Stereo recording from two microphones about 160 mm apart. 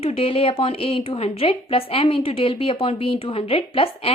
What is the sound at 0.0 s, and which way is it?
A woman's voice, 40° left (ahead or behind).